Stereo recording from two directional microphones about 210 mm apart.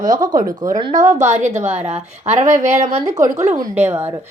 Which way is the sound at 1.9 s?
35° right (ahead or behind).